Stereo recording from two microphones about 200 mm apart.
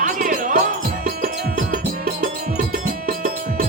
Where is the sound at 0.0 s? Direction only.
40° right (ahead or behind).